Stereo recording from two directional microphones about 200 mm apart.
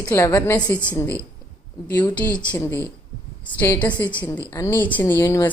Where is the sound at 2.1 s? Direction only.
5° left (ahead or behind).